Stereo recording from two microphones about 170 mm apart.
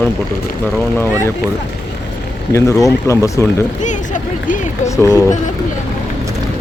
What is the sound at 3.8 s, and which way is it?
Speech, 45° left (ahead or behind).